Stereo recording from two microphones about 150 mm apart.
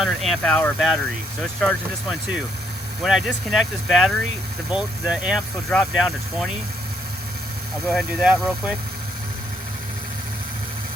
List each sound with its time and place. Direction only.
0.0 s speech: centre (ahead or behind)
7.9 s speech: 5° right (ahead or behind)